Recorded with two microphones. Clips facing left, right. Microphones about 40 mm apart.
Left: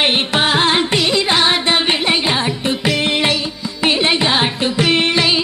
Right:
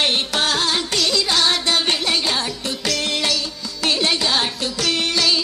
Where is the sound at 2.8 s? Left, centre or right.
Left.